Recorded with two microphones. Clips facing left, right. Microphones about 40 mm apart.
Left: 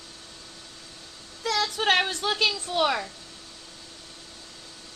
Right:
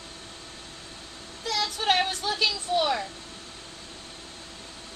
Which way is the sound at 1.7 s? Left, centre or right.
Left.